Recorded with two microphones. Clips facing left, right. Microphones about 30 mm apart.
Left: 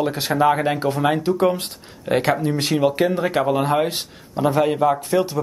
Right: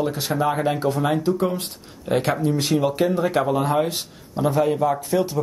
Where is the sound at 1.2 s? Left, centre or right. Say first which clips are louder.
Left 3 dB; left.